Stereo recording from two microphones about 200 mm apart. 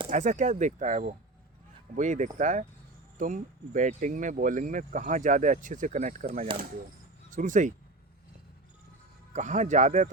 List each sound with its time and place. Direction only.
0.1 s speech: 35° right (ahead or behind)
9.3 s speech: 35° right (ahead or behind)